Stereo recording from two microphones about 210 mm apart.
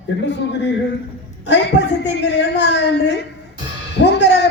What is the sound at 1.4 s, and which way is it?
A woman's voice, 55° left (ahead or behind).